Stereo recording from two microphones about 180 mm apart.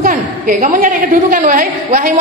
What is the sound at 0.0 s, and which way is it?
A woman's voice, 50° right (ahead or behind).